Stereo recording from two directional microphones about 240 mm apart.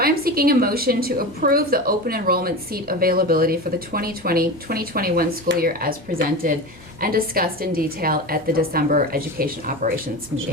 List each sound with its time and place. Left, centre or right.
0.0 s a woman's voice: right